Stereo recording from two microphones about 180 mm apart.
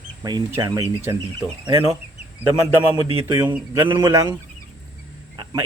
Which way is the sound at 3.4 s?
10° right (ahead or behind).